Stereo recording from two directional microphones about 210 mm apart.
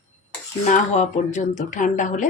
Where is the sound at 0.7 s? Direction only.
35° left (ahead or behind).